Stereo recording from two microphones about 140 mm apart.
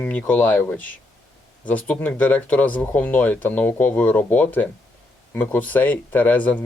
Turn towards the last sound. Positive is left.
turn(degrees=10)  # may be behind; listen again after turning